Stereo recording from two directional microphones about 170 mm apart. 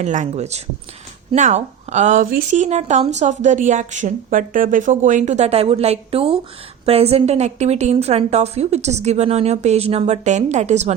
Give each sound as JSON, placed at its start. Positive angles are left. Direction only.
{"t": 0.0, "sound": "a woman's voice", "side_deg": -45}